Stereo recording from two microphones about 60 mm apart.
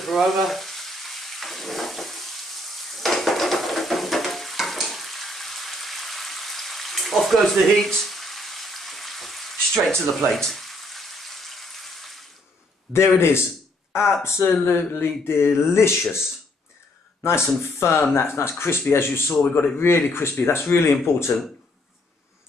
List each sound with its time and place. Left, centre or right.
0.0 s frying: centre
12.9 s speech: left
13.9 s speech: centre
14.2 s speech: left